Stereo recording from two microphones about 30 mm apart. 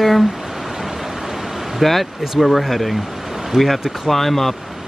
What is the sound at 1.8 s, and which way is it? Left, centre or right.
Speech, centre.